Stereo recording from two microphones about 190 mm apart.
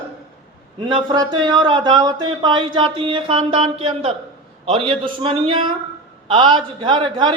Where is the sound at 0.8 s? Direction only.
25° right (ahead or behind).